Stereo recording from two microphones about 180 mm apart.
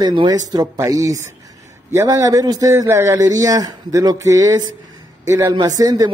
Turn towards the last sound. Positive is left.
turn(degrees=-20)  # may be behind; listen again after turning